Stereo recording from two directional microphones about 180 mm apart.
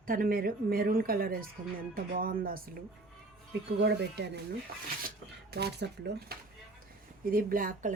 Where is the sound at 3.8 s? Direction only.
70° right (ahead or behind).